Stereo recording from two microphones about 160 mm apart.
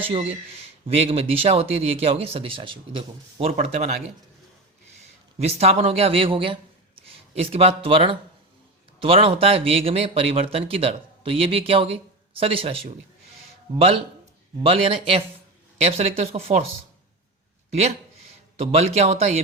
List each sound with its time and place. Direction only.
0.0 s speech: 35° right (ahead or behind)
5.0 s speech: 40° right (ahead or behind)
14.6 s speech: 35° right (ahead or behind)
18.6 s speech: 40° right (ahead or behind)